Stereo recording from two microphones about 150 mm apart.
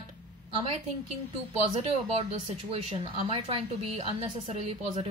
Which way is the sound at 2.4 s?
40° right (ahead or behind).